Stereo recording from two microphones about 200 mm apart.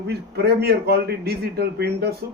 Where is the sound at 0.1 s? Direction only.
55° right (ahead or behind).